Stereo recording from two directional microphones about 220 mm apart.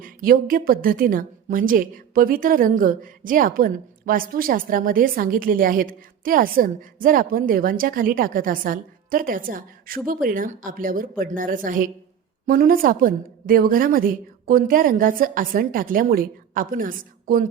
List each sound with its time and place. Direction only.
0.0 s a woman's voice: 40° right (ahead or behind)